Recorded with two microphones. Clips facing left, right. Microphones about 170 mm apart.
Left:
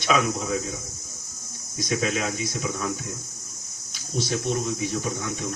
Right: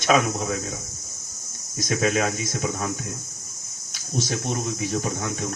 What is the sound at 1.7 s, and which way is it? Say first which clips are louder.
Speech: right 3 dB; 50° right (ahead or behind).